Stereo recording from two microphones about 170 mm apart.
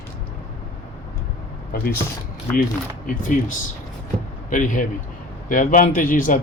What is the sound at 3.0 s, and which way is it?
A man's voice, 50° left (ahead or behind).